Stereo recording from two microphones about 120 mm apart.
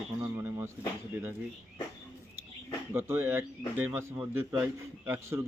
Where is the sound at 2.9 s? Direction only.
20° right (ahead or behind).